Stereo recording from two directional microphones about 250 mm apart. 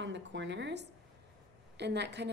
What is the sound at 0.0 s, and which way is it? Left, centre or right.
A woman's voice, right.